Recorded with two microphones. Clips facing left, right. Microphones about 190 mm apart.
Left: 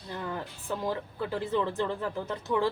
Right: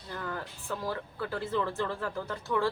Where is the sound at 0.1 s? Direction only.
20° left (ahead or behind).